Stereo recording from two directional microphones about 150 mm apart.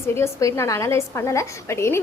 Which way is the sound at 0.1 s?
20° left (ahead or behind).